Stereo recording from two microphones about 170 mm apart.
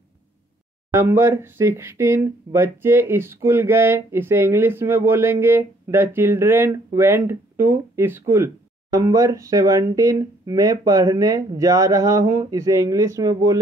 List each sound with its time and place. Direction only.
0.9 s speech: 15° right (ahead or behind)